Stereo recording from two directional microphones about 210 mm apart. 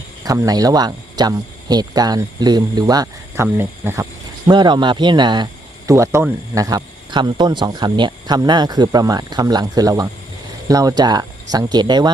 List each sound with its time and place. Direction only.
0.3 s speech: 15° right (ahead or behind)
4.4 s speech: 20° right (ahead or behind)